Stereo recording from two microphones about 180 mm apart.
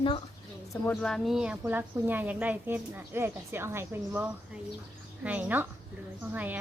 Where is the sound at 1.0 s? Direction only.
5° left (ahead or behind).